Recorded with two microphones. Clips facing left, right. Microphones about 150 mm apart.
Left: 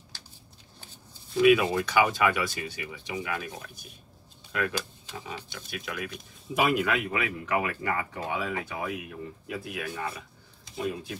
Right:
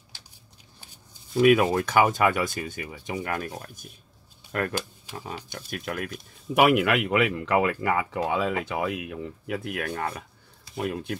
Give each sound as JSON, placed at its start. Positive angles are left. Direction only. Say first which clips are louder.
{"t": 1.4, "sound": "speech", "louder": "right 2 dB", "side_deg": -45}
{"t": 6.5, "sound": "speech", "louder": "right 5 dB", "side_deg": -70}